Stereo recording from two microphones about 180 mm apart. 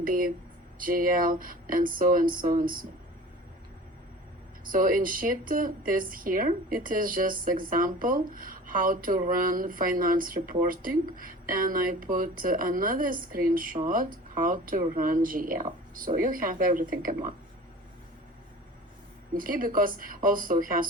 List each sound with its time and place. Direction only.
0.0 s speech: 50° right (ahead or behind)
4.6 s speech: 50° right (ahead or behind)
19.3 s speech: 50° right (ahead or behind)